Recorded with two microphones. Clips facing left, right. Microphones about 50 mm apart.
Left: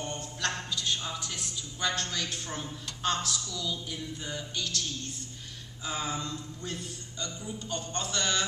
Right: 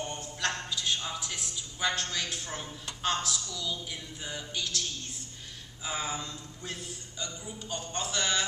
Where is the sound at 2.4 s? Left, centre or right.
Centre.